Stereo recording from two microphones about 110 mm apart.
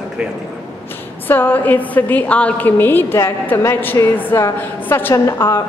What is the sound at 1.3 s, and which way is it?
A woman's voice, 20° left (ahead or behind).